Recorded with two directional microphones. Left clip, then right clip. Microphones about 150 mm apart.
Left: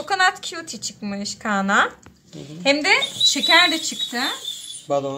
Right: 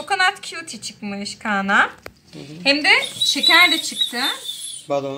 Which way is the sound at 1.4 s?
25° left (ahead or behind).